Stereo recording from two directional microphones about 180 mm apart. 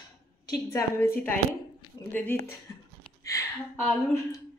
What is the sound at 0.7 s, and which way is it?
A woman's voice, 15° left (ahead or behind).